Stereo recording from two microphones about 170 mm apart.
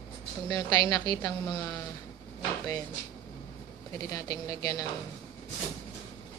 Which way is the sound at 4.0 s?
20° left (ahead or behind).